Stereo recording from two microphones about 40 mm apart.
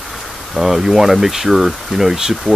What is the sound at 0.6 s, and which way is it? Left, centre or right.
Speech, centre.